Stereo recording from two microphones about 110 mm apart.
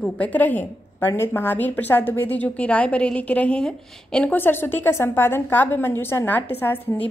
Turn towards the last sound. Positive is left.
turn(degrees=15)  # may be behind; listen again after turning